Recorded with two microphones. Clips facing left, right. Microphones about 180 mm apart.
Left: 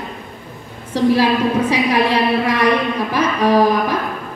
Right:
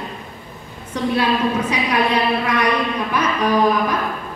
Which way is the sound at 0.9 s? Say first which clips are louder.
Left 5 dB; 30° left (ahead or behind).